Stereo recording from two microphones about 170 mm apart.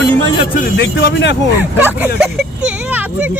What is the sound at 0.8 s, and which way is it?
Speech, 90° left.